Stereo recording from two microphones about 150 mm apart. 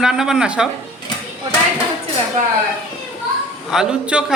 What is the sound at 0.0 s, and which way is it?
Speech, 5° right (ahead or behind).